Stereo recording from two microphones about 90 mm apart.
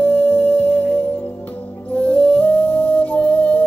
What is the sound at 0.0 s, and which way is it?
Music, 20° left (ahead or behind).